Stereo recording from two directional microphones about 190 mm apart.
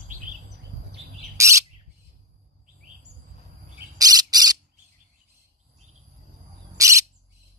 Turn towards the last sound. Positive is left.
turn(degrees=-15)  # may be behind; listen again after turning